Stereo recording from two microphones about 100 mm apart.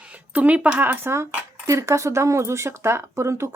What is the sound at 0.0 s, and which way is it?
A woman's voice, 15° right (ahead or behind).